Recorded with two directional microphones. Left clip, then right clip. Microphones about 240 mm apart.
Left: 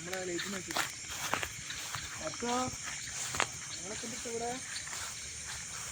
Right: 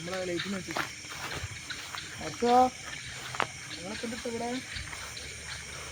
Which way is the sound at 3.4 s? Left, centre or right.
Left.